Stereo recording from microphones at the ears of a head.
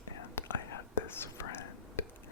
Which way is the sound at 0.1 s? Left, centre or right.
Left.